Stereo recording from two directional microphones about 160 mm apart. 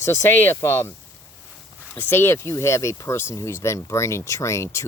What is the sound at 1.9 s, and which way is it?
Speech, 15° left (ahead or behind).